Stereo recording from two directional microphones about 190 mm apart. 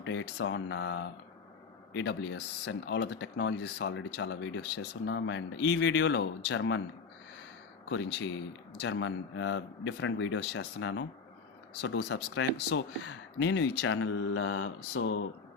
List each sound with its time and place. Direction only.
0.0 s speech: 75° left (ahead or behind)
7.9 s speech: 70° left (ahead or behind); by 15.2 s 90° left